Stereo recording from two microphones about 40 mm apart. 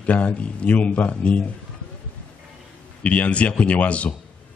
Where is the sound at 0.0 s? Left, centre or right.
Left.